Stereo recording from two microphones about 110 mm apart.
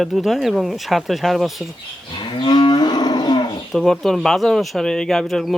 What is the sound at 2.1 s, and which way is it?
Cattle, 45° left (ahead or behind).